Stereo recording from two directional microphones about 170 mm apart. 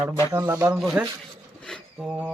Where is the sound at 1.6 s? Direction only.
5° left (ahead or behind).